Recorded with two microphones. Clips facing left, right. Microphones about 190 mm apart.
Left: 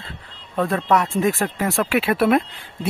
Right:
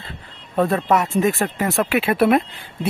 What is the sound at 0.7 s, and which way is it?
Speech, 5° right (ahead or behind).